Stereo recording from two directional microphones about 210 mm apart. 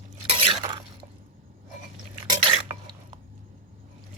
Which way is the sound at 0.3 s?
25° right (ahead or behind).